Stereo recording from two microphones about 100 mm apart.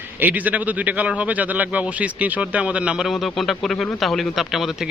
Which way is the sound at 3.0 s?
Centre (ahead or behind).